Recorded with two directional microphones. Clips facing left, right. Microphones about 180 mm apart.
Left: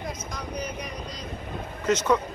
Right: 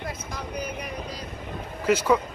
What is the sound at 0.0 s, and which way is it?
Vehicle, 5° right (ahead or behind).